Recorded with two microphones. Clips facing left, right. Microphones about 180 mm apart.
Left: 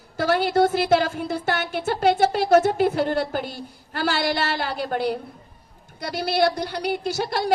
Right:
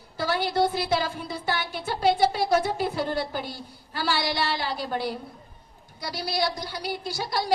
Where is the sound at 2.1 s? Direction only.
50° left (ahead or behind).